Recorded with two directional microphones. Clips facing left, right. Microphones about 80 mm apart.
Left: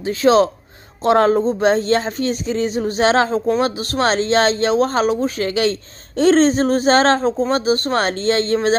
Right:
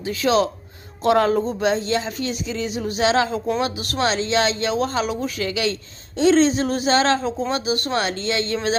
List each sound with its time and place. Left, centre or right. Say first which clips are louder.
0.0 s speech: left 5 dB; left
1.7 s speech: left 5 dB; left